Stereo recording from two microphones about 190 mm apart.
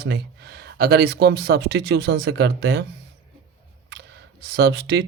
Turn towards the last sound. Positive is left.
turn(degrees=-60)  # may be behind; listen again after turning